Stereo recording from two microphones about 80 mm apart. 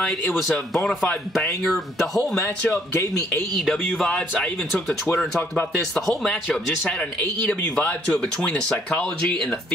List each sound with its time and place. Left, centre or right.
0.4 s a man's voice: centre
3.0 s speech: left
3.5 s a man's voice: centre